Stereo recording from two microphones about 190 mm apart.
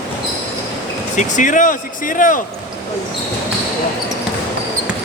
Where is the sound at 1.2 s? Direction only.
40° left (ahead or behind).